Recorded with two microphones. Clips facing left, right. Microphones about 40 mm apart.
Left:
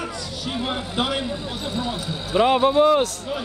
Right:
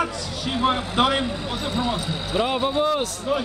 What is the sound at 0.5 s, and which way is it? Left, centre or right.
Speech, right.